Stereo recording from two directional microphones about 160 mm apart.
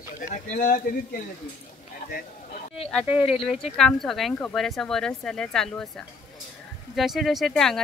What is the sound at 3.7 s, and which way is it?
Speech, 5° left (ahead or behind).